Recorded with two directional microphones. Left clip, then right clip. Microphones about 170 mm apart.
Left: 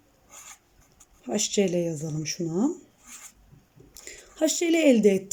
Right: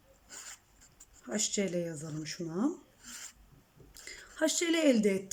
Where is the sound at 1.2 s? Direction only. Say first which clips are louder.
Left 8 dB; 20° left (ahead or behind).